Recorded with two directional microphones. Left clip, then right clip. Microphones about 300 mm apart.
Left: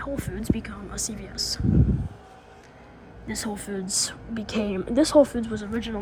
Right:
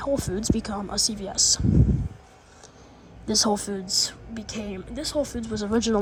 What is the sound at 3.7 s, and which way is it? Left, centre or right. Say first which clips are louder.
A woman's voice: right 3 dB; centre.